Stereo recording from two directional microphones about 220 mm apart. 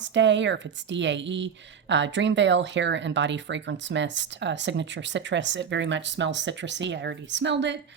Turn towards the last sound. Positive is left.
turn(degrees=-55)  # may be behind; listen again after turning